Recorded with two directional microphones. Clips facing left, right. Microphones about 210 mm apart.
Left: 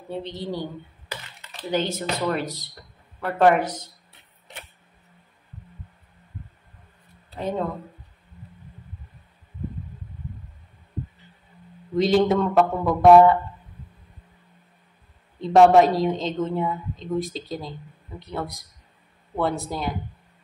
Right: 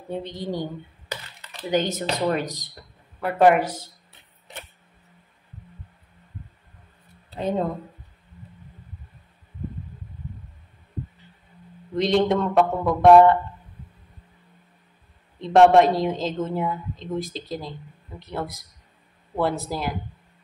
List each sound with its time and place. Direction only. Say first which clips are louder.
0.3 s a woman's voice: right 1 dB; 15° right (ahead or behind)
1.7 s a woman's voice: right 2 dB; 15° right (ahead or behind)
7.3 s a woman's voice: right 2 dB; 15° right (ahead or behind)
11.9 s a woman's voice: left 1 dB; centre (ahead or behind)
15.4 s a woman's voice: even; centre (ahead or behind)